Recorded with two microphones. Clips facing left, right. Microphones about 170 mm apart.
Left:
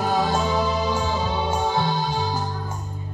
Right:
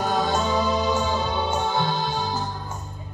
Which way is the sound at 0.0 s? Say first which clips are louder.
Left 1 dB; 5° left (ahead or behind).